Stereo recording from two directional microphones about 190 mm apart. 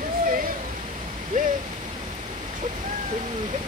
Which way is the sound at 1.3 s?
45° right (ahead or behind).